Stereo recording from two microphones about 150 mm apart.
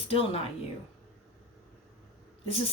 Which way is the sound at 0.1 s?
40° left (ahead or behind).